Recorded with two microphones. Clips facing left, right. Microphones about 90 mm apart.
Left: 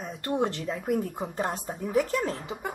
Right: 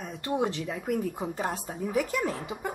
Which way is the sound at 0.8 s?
15° left (ahead or behind).